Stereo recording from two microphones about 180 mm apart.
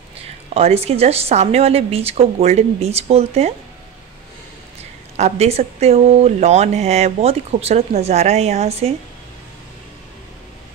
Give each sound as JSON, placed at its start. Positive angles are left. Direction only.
{"t": 0.6, "sound": "speech", "side_deg": -35}
{"t": 5.1, "sound": "speech", "side_deg": -35}